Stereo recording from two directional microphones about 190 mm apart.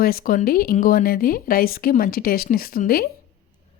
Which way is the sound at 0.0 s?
50° left (ahead or behind).